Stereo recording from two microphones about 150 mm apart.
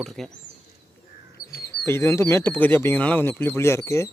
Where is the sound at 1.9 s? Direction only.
15° left (ahead or behind).